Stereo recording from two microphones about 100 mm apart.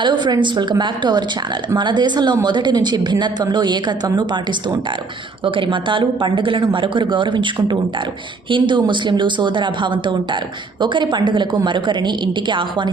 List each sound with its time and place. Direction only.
0.0 s speech: 50° right (ahead or behind)
5.5 s a woman's voice: 55° right (ahead or behind)